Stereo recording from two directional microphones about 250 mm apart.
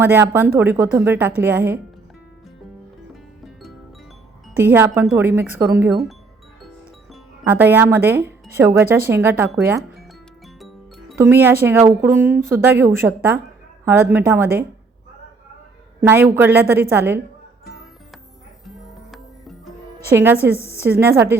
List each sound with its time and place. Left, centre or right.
0.0 s speech: centre
3.4 s music: centre
4.5 s speech: centre
11.2 s speech: centre
16.0 s speech: centre
18.6 s music: centre
20.1 s speech: centre